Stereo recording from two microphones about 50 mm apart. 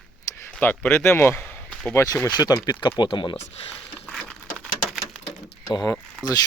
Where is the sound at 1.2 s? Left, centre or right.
Left.